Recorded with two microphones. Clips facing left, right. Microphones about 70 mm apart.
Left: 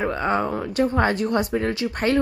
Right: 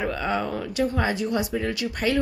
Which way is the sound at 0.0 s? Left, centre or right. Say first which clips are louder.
Left 3 dB; left.